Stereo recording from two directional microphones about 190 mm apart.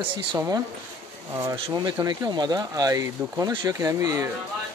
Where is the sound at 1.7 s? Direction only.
20° right (ahead or behind).